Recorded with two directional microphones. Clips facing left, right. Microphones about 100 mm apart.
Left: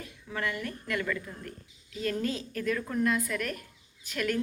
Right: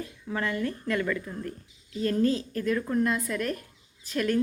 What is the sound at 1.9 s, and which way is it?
A woman's voice, 30° right (ahead or behind).